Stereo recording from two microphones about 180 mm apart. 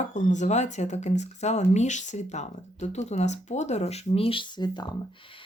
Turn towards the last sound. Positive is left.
turn(degrees=25)  # may be behind; listen again after turning